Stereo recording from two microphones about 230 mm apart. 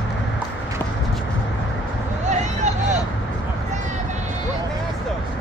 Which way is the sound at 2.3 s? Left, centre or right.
Right.